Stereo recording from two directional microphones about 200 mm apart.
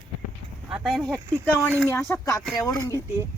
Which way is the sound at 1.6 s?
5° left (ahead or behind).